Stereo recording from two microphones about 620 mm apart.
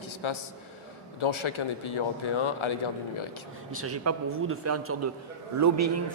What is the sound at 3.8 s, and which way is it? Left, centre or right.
A man's voice, right.